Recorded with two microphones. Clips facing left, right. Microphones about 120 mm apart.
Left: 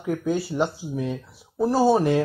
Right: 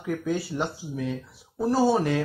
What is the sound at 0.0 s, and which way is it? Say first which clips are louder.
Speech: left 3 dB; 15° left (ahead or behind).